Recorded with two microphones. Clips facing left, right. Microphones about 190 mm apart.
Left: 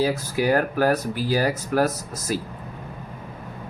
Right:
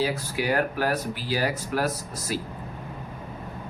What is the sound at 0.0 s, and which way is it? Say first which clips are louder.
Speech: left 5 dB; 45° left (ahead or behind).